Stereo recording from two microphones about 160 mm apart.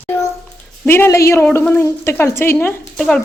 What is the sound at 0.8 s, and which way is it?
A woman's voice, 15° left (ahead or behind).